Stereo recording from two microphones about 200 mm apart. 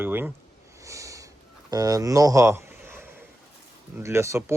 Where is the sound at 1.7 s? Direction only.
20° right (ahead or behind).